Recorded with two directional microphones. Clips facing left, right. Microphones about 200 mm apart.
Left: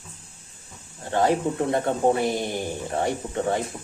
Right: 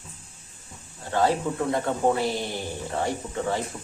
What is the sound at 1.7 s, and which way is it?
Speech, 25° left (ahead or behind).